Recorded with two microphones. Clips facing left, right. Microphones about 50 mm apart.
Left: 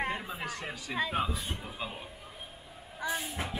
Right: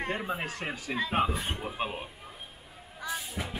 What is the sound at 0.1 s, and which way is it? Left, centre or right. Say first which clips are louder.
Speech: right 4 dB; right.